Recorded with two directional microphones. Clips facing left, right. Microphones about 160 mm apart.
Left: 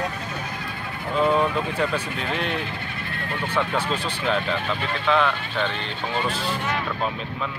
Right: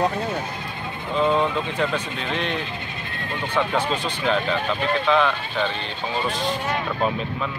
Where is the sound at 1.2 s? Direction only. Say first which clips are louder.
Even; 20° right (ahead or behind).